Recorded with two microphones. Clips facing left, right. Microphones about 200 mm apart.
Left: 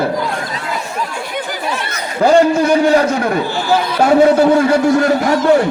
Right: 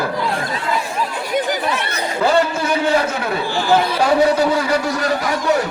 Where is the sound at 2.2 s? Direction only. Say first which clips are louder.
Left 7 dB; 40° left (ahead or behind).